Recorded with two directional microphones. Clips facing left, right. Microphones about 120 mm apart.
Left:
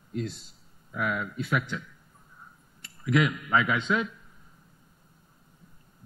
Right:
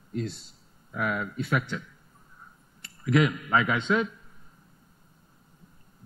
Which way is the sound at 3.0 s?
40° right (ahead or behind).